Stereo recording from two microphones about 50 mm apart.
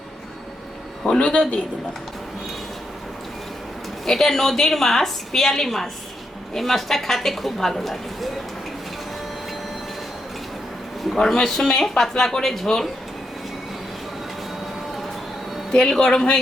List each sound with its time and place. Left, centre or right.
1.2 s speech: left
4.0 s a woman's voice: centre
11.1 s a woman's voice: centre
15.7 s a woman's voice: centre